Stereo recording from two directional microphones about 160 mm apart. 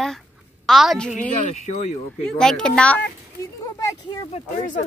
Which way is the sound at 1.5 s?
45° left (ahead or behind).